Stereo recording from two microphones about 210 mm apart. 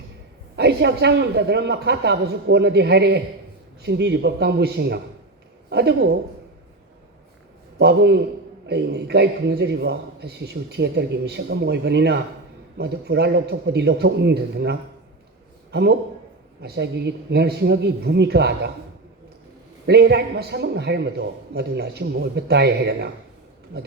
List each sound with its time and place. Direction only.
0.5 s a man's voice: 50° right (ahead or behind)
7.8 s a man's voice: 55° right (ahead or behind)
19.9 s a man's voice: 50° right (ahead or behind)